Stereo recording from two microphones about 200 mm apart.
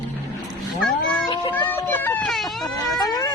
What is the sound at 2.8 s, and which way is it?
Speech, 20° left (ahead or behind).